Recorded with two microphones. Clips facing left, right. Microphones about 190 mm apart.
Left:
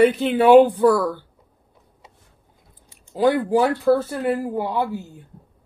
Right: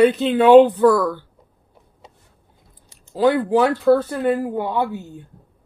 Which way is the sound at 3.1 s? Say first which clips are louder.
Right 1 dB; 15° left (ahead or behind).